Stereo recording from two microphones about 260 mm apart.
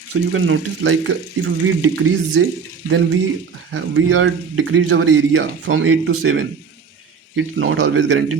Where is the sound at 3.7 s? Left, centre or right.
Right.